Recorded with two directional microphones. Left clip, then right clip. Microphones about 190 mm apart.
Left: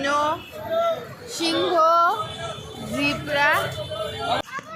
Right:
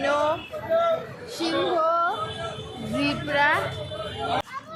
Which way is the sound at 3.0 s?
5° right (ahead or behind).